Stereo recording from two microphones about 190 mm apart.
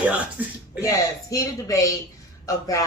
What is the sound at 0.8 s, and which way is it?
Speech, 20° left (ahead or behind).